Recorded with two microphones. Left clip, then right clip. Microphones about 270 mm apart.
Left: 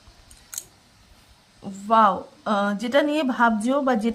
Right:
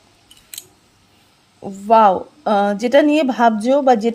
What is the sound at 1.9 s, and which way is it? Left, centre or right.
A woman's voice, centre.